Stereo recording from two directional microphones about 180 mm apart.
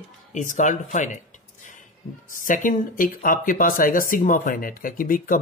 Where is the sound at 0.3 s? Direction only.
45° left (ahead or behind).